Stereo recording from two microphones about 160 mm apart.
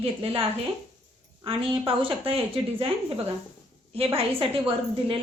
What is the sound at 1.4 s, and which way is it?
Speech, 35° right (ahead or behind).